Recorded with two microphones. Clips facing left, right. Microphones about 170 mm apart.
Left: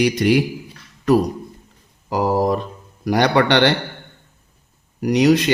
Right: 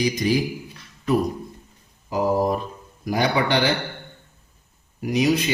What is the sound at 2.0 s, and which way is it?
Speech, 75° left (ahead or behind).